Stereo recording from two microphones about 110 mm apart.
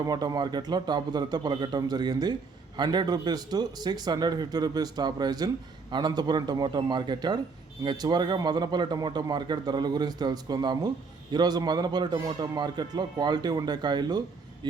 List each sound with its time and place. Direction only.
0.0 s a man's voice: 35° right (ahead or behind)